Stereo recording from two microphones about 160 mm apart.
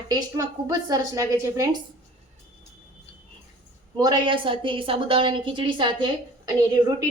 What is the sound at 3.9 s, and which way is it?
A woman's voice, 30° right (ahead or behind).